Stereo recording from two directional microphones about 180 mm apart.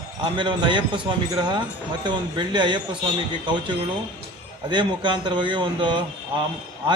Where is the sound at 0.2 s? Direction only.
25° right (ahead or behind).